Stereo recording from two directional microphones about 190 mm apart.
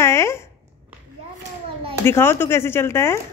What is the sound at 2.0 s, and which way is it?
A woman's voice, 10° left (ahead or behind).